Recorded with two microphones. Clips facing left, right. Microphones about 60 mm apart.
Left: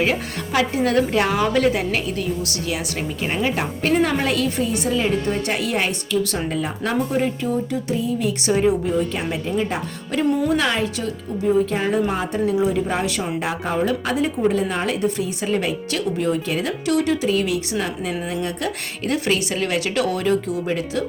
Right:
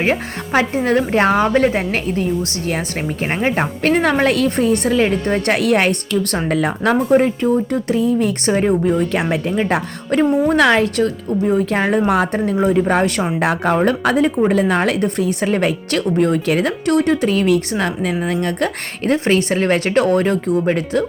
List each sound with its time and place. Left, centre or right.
0.0 s a woman's voice: right
3.3 s speech: right
19.0 s speech: right